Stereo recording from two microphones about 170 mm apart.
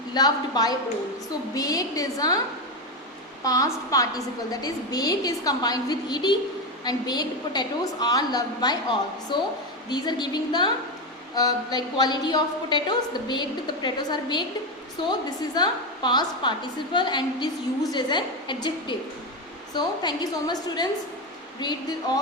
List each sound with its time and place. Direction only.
0.1 s a woman's voice: 25° left (ahead or behind)
3.4 s a woman's voice: 20° left (ahead or behind)